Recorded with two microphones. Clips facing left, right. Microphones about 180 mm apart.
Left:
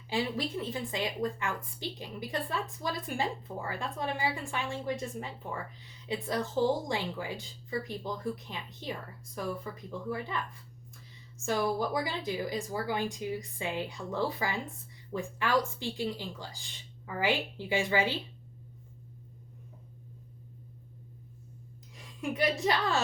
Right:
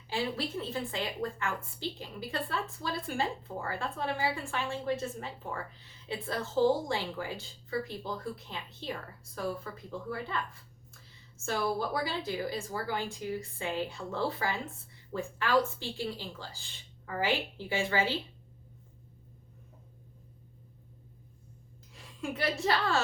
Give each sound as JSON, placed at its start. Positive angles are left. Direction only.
{"t": 0.1, "sound": "a woman's voice", "side_deg": 15}
{"t": 11.4, "sound": "a woman's voice", "side_deg": 15}
{"t": 21.9, "sound": "a woman's voice", "side_deg": 15}